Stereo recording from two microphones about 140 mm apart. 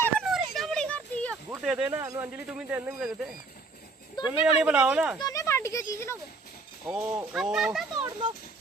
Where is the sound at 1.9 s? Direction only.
25° right (ahead or behind).